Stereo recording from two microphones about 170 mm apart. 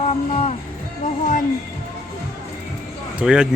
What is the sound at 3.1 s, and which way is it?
Speech, 5° right (ahead or behind).